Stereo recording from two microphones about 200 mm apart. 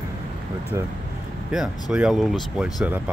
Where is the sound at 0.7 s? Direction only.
15° right (ahead or behind).